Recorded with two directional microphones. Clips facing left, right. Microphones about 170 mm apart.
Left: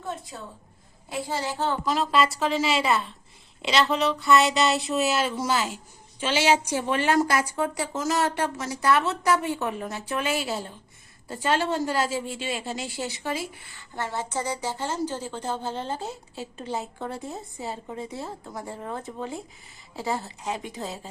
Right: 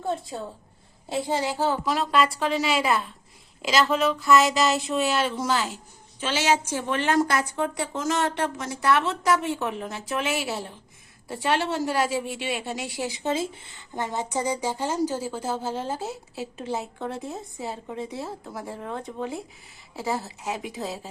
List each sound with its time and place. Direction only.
0.0 s a sound: 30° right (ahead or behind)
1.1 s speech: 15° right (ahead or behind); by 12.9 s centre (ahead or behind)
13.1 s speech: 20° right (ahead or behind); by 21.1 s centre (ahead or behind)